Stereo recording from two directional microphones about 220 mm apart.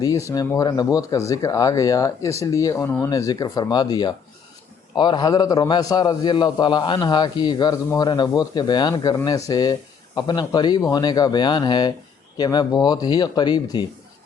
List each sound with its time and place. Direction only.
0.0 s a man's voice: 15° left (ahead or behind)